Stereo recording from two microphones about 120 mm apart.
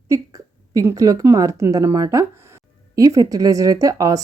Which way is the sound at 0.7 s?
30° right (ahead or behind).